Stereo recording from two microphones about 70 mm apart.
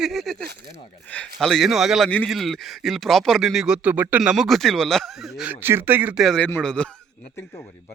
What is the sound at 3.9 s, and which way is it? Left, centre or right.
Speech, right.